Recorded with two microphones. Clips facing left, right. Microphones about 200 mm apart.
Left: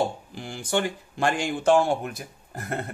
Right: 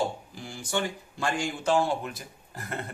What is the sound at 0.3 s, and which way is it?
A man's voice, 60° left (ahead or behind).